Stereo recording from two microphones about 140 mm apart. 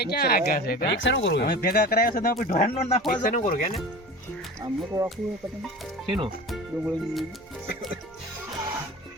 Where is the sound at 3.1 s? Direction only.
75° left (ahead or behind).